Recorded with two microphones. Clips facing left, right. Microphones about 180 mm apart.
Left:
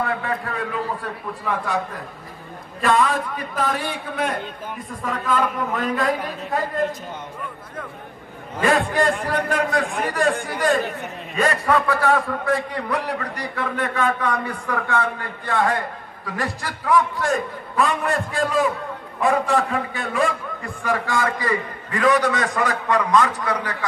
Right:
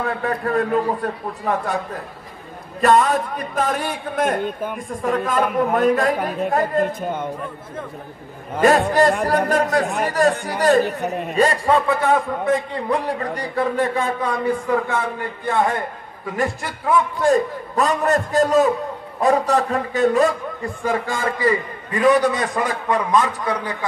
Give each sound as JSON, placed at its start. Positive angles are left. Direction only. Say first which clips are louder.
{"t": 0.2, "sound": "a man's voice", "louder": "right 6 dB", "side_deg": -45}
{"t": 2.8, "sound": "a man's voice", "louder": "right 4 dB", "side_deg": -40}
{"t": 8.5, "sound": "a man's voice", "louder": "right 4 dB", "side_deg": -45}
{"t": 11.3, "sound": "a man's voice", "louder": "right 2 dB", "side_deg": -30}
{"t": 17.7, "sound": "speech", "louder": "right 3 dB", "side_deg": -40}
{"t": 20.8, "sound": "a man's voice", "louder": "even", "side_deg": -25}